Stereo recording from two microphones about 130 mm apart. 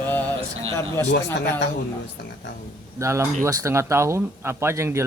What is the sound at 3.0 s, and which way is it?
Speech, 20° right (ahead or behind).